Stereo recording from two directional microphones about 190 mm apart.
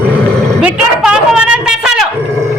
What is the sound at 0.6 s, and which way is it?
A man's voice, 5° right (ahead or behind).